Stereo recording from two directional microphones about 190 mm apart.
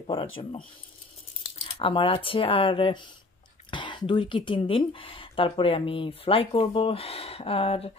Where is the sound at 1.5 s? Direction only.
25° left (ahead or behind).